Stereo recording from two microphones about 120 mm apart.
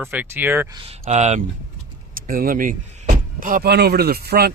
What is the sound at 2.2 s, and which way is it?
Speech, 90° right.